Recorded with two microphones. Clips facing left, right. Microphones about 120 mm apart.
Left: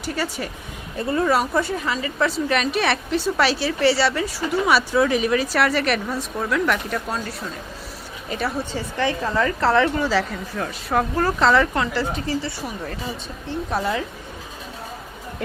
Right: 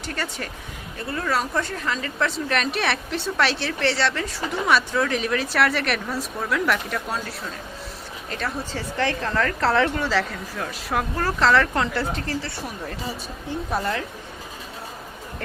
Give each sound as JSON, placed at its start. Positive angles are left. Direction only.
{"t": 0.0, "sound": "speech", "side_deg": 5}
{"t": 1.1, "sound": "speech", "side_deg": 20}
{"t": 1.4, "sound": "a woman's voice", "side_deg": 10}